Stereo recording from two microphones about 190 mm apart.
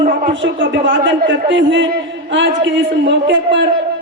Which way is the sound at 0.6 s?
75° right (ahead or behind).